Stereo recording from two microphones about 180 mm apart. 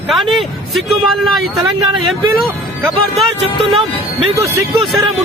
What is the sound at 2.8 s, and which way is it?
Speech, centre (ahead or behind).